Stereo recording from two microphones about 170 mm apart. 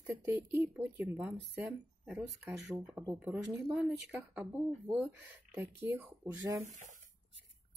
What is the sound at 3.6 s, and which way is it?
Speech, 5° right (ahead or behind).